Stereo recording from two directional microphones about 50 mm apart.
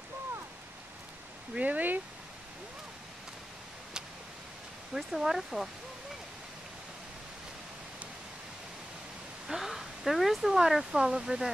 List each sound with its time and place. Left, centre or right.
1.6 s speech: right
4.9 s speech: centre
9.5 s speech: centre